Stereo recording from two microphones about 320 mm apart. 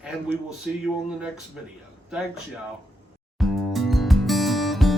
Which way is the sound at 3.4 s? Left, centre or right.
Centre.